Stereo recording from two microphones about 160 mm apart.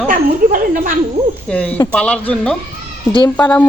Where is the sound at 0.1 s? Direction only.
60° right (ahead or behind).